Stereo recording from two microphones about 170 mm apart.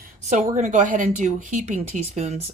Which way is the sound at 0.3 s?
45° right (ahead or behind).